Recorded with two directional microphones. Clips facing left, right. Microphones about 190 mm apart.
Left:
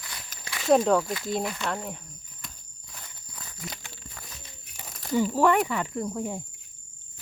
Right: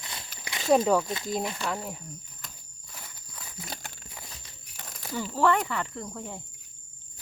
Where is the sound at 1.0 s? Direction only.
25° right (ahead or behind).